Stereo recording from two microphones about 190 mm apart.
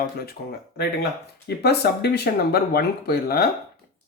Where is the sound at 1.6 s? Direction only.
60° left (ahead or behind).